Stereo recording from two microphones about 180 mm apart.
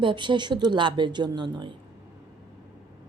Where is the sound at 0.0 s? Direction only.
25° right (ahead or behind).